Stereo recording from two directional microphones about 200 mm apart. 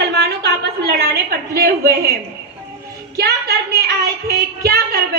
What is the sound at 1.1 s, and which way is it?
Speech, 50° right (ahead or behind).